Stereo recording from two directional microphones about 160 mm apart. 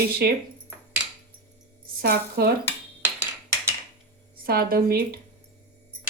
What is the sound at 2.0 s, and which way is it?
Speech, 75° right (ahead or behind).